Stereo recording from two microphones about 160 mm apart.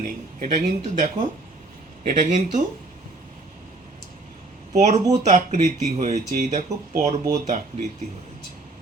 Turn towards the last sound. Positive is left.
turn(degrees=-45)  # may be behind; listen again after turning